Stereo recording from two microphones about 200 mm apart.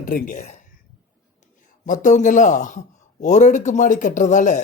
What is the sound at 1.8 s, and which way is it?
Speech, 40° left (ahead or behind).